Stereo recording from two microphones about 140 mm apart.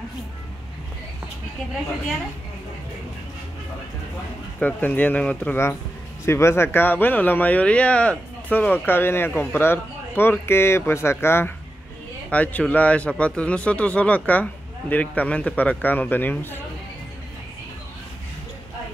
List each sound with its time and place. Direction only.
4.6 s speech: 10° left (ahead or behind)